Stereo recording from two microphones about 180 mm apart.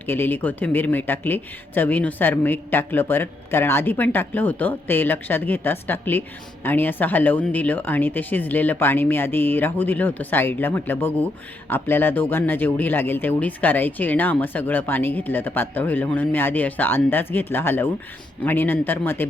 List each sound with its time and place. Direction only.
0.0 s speech: 10° left (ahead or behind)